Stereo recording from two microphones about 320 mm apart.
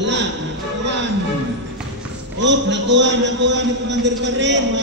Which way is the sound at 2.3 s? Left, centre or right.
Right.